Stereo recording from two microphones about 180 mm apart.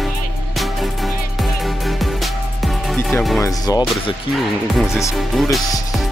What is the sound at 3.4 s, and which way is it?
Speech, 20° left (ahead or behind).